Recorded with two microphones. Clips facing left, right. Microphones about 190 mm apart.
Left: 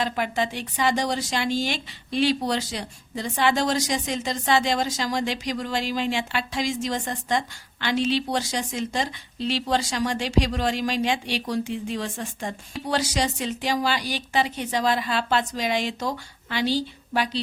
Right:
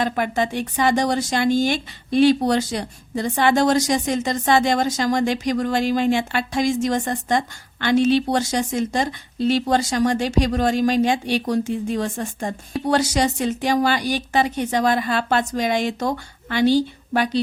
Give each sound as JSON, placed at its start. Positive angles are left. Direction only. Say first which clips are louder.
{"t": 0.0, "sound": "speech", "louder": "right 4 dB", "side_deg": -50}